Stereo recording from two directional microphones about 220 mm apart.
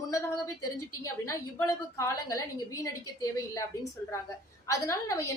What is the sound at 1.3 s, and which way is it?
A woman's voice, 15° left (ahead or behind).